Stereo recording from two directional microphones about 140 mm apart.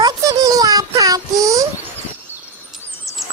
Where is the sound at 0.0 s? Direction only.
25° right (ahead or behind).